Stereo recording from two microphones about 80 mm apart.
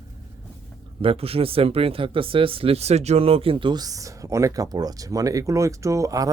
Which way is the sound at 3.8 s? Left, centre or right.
Right.